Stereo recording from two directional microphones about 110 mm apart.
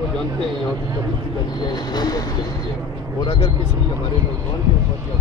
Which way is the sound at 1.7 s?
40° left (ahead or behind).